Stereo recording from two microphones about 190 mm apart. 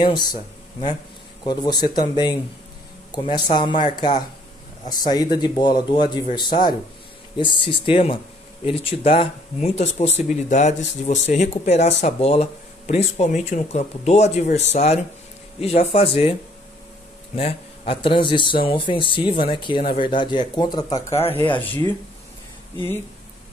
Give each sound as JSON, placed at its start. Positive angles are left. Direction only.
{"t": 0.0, "sound": "speech", "side_deg": 20}
{"t": 1.4, "sound": "speech", "side_deg": 20}
{"t": 3.3, "sound": "speech", "side_deg": 25}
{"t": 7.5, "sound": "speech", "side_deg": 25}
{"t": 17.4, "sound": "speech", "side_deg": 30}
{"t": 21.5, "sound": "speech", "side_deg": 10}